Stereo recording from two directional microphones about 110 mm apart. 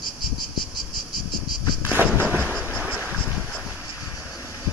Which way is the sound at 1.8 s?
15° right (ahead or behind).